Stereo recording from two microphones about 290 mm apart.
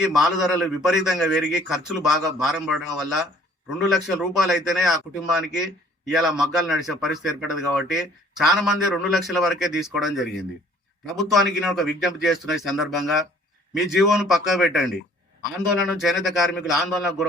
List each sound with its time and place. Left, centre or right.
0.2 s speech: centre